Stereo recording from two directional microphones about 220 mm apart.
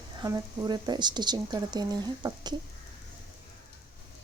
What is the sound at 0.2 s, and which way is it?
Speech, 15° right (ahead or behind).